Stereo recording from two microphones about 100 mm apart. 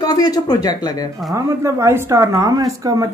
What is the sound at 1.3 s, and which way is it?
A woman's voice, 30° right (ahead or behind).